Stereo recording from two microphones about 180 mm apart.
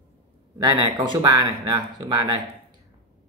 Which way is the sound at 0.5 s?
20° right (ahead or behind).